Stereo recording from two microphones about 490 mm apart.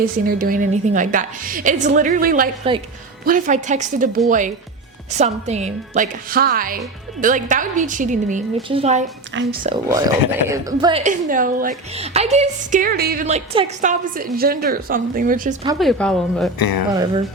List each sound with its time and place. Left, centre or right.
0.3 s a woman's voice: centre
15.8 s speech: centre
16.6 s speech: left
16.9 s a woman's voice: centre